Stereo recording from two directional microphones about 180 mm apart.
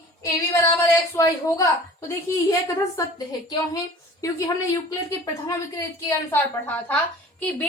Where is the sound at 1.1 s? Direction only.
15° left (ahead or behind).